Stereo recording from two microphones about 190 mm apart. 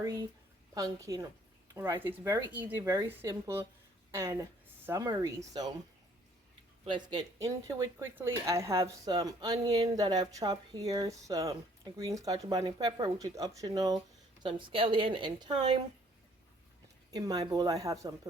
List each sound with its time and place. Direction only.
0.0 s speech: 15° right (ahead or behind)
6.9 s speech: 25° right (ahead or behind)
17.1 s speech: 20° right (ahead or behind)